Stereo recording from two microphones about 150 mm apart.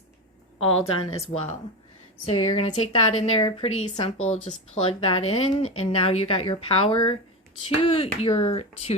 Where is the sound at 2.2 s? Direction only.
45° left (ahead or behind).